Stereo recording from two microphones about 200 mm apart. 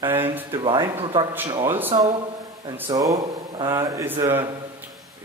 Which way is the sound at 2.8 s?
20° right (ahead or behind).